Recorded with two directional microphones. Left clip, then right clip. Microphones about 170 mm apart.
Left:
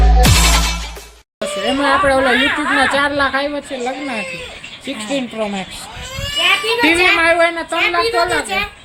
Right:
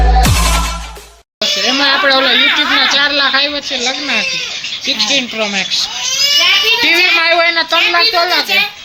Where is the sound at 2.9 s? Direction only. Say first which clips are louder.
Right 4 dB; 15° left (ahead or behind).